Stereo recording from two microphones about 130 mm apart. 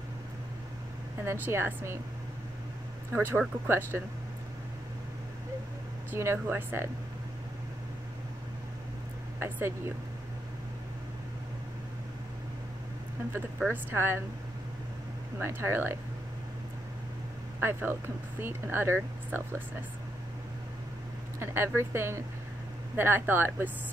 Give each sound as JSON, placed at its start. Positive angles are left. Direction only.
{"t": 1.2, "sound": "speech", "side_deg": -20}
{"t": 3.2, "sound": "speech", "side_deg": -20}
{"t": 6.1, "sound": "speech", "side_deg": -20}
{"t": 9.4, "sound": "speech", "side_deg": -20}
{"t": 13.7, "sound": "speech", "side_deg": -20}
{"t": 15.3, "sound": "speech", "side_deg": -20}
{"t": 17.6, "sound": "speech", "side_deg": -20}
{"t": 21.4, "sound": "speech", "side_deg": -20}